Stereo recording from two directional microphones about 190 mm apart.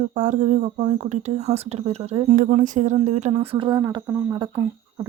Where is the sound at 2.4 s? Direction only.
45° right (ahead or behind).